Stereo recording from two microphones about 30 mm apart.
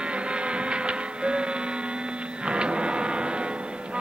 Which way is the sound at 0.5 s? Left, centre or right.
Right.